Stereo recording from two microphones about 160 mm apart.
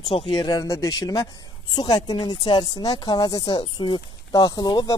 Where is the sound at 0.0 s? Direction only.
35° left (ahead or behind).